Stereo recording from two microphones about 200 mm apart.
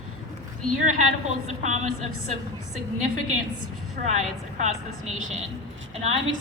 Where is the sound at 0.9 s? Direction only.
35° right (ahead or behind).